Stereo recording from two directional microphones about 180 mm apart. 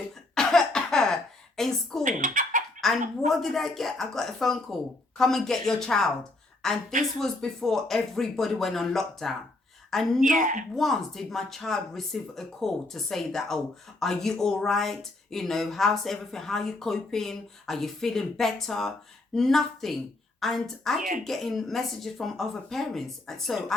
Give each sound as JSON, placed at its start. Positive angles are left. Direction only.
{"t": 0.3, "sound": "cough", "side_deg": 5}
{"t": 2.0, "sound": "speech", "side_deg": -45}
{"t": 3.2, "sound": "a woman's voice", "side_deg": 0}
{"t": 10.2, "sound": "a woman's voice", "side_deg": -45}
{"t": 10.8, "sound": "a woman's voice", "side_deg": 0}